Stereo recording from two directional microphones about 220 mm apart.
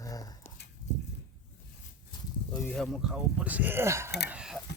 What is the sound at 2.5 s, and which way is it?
Speech, 5° left (ahead or behind).